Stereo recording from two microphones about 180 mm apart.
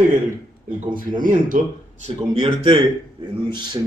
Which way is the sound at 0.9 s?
50° right (ahead or behind).